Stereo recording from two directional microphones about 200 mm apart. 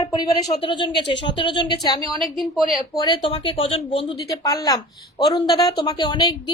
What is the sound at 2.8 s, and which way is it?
A woman's voice, 20° left (ahead or behind).